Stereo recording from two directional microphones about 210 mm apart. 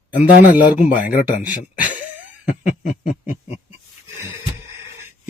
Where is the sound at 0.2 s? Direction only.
40° left (ahead or behind).